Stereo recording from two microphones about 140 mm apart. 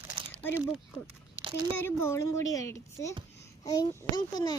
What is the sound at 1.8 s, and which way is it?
A woman's voice, 15° left (ahead or behind).